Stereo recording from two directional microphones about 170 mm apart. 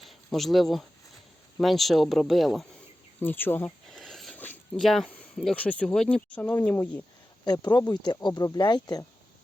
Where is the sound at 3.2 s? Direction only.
10° left (ahead or behind).